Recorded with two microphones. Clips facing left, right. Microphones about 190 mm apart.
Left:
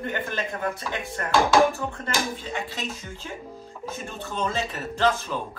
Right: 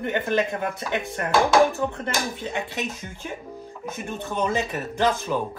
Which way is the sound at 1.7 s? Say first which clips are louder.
Right 3 dB; 20° right (ahead or behind).